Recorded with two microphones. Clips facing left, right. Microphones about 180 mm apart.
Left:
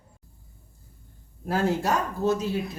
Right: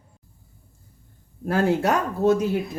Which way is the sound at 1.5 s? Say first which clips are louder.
Right 4 dB; 60° right (ahead or behind).